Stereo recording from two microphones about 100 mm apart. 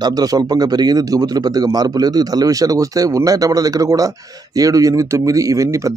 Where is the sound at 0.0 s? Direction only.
40° right (ahead or behind).